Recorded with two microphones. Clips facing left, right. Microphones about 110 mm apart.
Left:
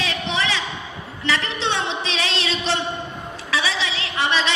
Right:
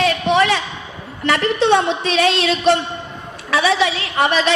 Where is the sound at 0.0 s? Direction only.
55° right (ahead or behind).